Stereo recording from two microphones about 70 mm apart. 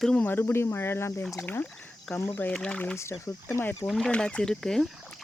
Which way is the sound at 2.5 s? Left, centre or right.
Centre.